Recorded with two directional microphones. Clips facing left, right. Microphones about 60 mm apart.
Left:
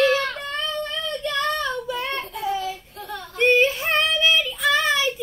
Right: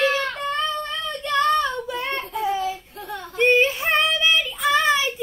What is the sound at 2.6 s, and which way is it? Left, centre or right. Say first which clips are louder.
Female singing: right 3 dB; right.